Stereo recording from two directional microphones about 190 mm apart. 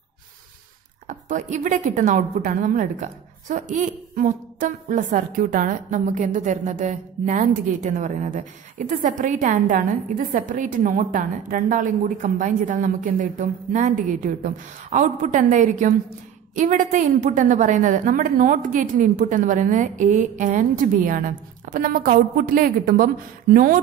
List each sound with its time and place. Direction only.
1.0 s a woman's voice: 40° right (ahead or behind)